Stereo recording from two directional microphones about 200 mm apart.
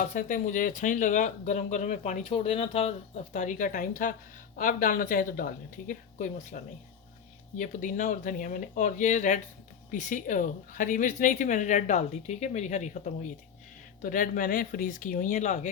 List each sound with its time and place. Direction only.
0.0 s speech: 40° left (ahead or behind)
7.6 s speech: 40° left (ahead or behind)